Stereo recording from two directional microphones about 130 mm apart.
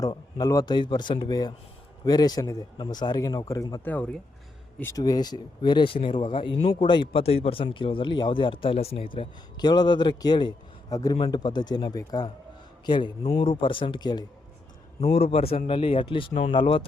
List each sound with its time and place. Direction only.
0.0 s a man's voice: 30° left (ahead or behind)
3.8 s speech: 10° left (ahead or behind)
4.8 s a man's voice: 25° left (ahead or behind)
15.0 s a man's voice: 50° left (ahead or behind)